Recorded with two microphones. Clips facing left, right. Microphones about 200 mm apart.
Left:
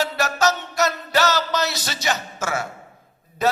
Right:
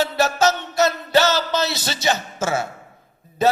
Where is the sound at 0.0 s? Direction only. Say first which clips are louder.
Right 3 dB; 25° right (ahead or behind).